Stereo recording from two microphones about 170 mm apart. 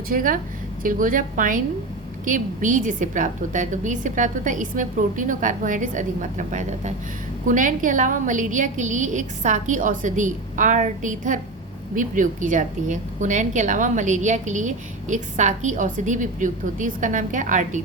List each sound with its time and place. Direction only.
0.1 s a woman's voice: 55° right (ahead or behind)